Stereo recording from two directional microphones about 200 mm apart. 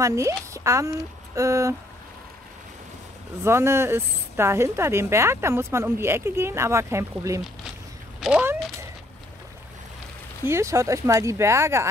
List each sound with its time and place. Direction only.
0.0 s a woman's voice: 15° right (ahead or behind)
3.4 s a woman's voice: 15° right (ahead or behind)
10.4 s a woman's voice: 15° right (ahead or behind)